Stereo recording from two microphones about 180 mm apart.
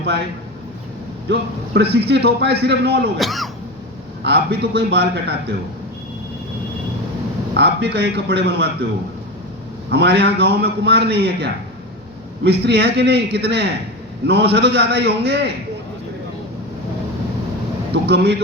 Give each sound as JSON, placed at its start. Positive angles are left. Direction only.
{"t": 1.3, "sound": "a man's voice", "side_deg": -65}
{"t": 3.2, "sound": "speech", "side_deg": 0}
{"t": 4.2, "sound": "a man's voice", "side_deg": -65}
{"t": 7.5, "sound": "a man's voice", "side_deg": -70}
{"t": 9.9, "sound": "a man's voice", "side_deg": -70}
{"t": 17.9, "sound": "a man's voice", "side_deg": -65}